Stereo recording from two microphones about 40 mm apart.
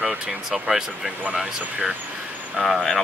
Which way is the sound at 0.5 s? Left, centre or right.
Centre.